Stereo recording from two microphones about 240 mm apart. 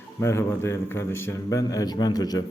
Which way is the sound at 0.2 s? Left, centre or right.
Centre.